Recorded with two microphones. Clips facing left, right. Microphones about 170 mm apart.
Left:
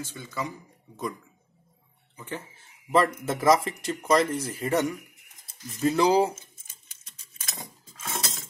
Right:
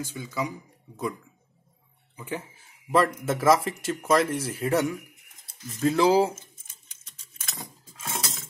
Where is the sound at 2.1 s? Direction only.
10° right (ahead or behind).